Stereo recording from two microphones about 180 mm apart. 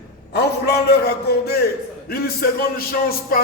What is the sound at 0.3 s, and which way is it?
A man's voice, 65° left (ahead or behind).